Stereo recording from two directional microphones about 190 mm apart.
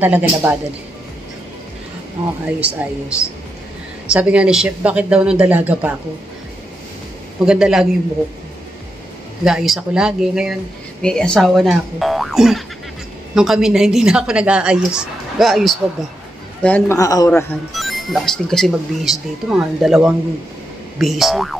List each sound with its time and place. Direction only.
0.0 s speech: 10° right (ahead or behind)
3.1 s speech: 5° right (ahead or behind)
7.4 s speech: 5° right (ahead or behind)
9.4 s a man's voice: centre (ahead or behind); by 17.3 s 20° left (ahead or behind)
17.3 s speech: 5° left (ahead or behind)